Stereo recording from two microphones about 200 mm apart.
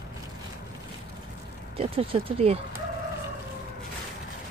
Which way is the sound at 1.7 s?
30° right (ahead or behind).